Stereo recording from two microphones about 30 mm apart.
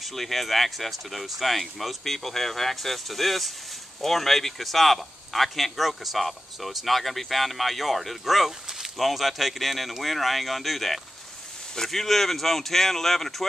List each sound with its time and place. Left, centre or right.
0.0 s speech: centre
8.6 s a sound: centre
8.9 s speech: centre